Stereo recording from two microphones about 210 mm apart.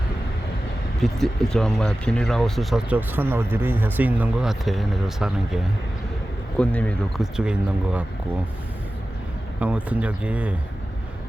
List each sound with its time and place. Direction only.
1.0 s speech: centre (ahead or behind)
6.6 s speech: 5° left (ahead or behind)
9.6 s speech: 5° right (ahead or behind)